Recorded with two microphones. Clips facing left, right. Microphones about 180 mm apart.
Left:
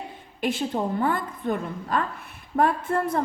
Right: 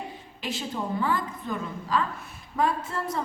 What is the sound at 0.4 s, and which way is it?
A woman's voice, 55° left (ahead or behind).